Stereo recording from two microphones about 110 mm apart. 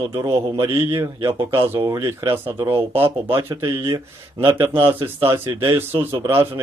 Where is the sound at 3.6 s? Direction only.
45° right (ahead or behind).